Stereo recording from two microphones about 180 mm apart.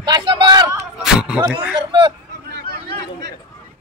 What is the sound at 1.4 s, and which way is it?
Speech, 25° right (ahead or behind).